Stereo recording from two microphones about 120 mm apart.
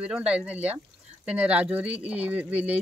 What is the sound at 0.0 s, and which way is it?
Speech, 10° right (ahead or behind).